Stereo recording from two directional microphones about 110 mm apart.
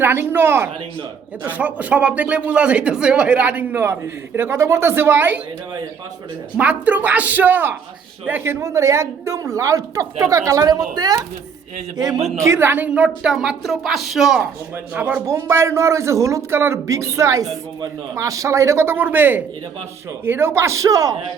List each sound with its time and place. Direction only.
0.0 s a woman's voice: 20° right (ahead or behind)
6.6 s a woman's voice: 15° right (ahead or behind); by 12.2 s 35° right (ahead or behind)
12.4 s a woman's voice: 25° right (ahead or behind); by 14.4 s 5° right (ahead or behind)
14.9 s a woman's voice: 15° right (ahead or behind); by 21.2 s 30° right (ahead or behind)